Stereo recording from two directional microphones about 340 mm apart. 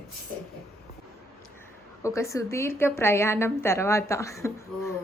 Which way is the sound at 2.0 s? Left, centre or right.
Centre.